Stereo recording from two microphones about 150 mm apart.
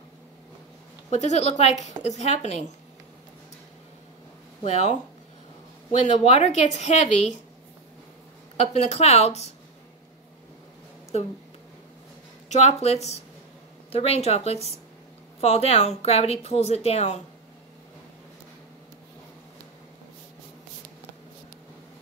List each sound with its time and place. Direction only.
1.1 s speech: 50° left (ahead or behind)
4.6 s speech: 50° left (ahead or behind)
8.5 s speech: 45° left (ahead or behind)
12.4 s speech: 45° left (ahead or behind)